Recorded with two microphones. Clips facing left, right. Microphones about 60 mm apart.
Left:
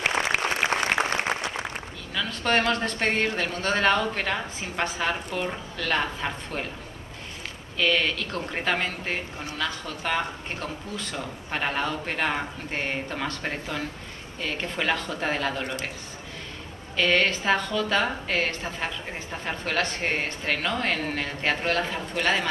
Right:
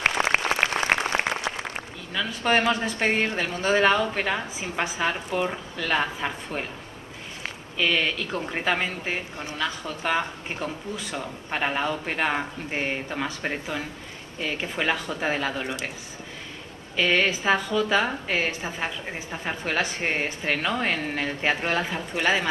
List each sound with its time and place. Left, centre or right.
0.3 s applause: right
1.5 s a sound: right
2.1 s speech: centre
7.7 s speech: centre
16.9 s speech: centre